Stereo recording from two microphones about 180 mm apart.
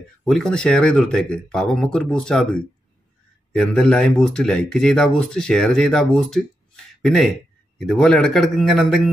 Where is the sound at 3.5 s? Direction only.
5° left (ahead or behind).